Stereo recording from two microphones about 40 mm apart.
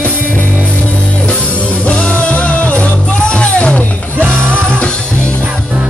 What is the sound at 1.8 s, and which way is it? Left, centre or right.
Music, left.